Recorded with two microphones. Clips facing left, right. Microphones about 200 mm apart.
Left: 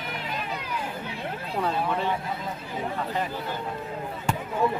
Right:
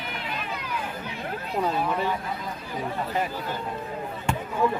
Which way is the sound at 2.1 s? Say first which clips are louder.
Left 1 dB; 25° left (ahead or behind).